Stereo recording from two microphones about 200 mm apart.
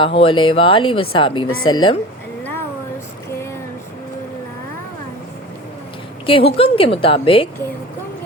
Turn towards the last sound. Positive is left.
turn(degrees=25)  # may be behind; listen again after turning